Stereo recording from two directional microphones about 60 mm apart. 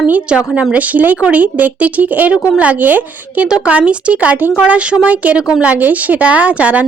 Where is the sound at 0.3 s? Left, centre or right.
Centre.